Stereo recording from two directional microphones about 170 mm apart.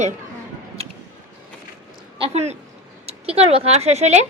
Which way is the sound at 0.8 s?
35° right (ahead or behind).